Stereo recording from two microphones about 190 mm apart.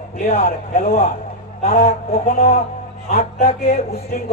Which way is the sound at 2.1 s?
50° left (ahead or behind).